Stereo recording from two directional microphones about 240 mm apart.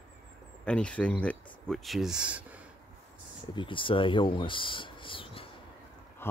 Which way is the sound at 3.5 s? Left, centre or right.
Left.